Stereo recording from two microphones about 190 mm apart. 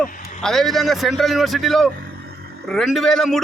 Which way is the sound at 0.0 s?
Centre (ahead or behind).